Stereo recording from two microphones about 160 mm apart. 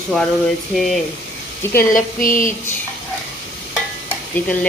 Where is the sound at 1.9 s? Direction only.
55° left (ahead or behind).